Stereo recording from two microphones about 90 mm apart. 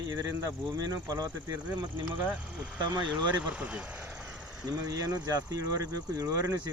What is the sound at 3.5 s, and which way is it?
Vehicle, 10° right (ahead or behind).